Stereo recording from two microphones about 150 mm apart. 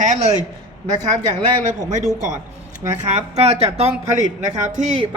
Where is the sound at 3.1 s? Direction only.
45° right (ahead or behind).